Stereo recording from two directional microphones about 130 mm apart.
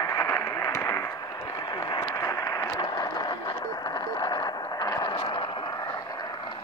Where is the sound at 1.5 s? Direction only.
35° left (ahead or behind).